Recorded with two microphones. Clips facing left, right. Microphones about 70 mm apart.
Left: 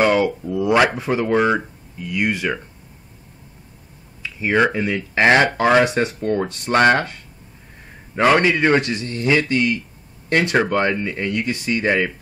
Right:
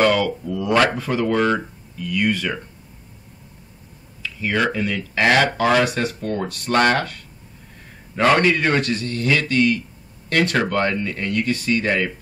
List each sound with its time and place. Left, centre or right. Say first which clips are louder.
0.0 s speech: left 1 dB; left
4.2 s speech: left 4 dB; left
8.2 s speech: left 1 dB; centre